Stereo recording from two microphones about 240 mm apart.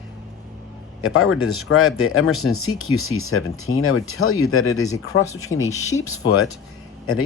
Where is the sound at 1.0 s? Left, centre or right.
Left.